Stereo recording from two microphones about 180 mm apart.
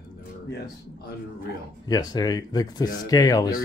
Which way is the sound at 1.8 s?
20° left (ahead or behind).